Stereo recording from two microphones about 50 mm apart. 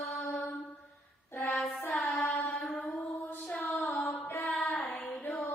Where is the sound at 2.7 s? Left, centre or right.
Left.